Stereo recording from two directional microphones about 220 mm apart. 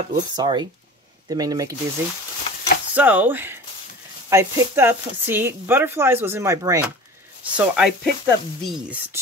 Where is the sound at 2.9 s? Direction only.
5° right (ahead or behind).